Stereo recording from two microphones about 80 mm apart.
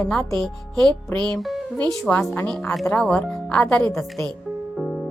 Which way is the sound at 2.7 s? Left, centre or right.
Centre.